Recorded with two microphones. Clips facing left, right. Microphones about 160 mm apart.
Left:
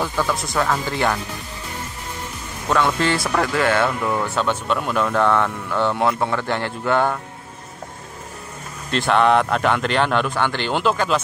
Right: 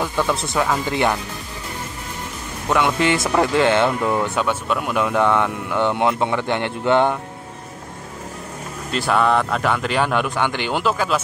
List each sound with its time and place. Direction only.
0.3 s speech: 25° right (ahead or behind)
2.7 s speech: 15° right (ahead or behind)
8.9 s speech: 5° right (ahead or behind)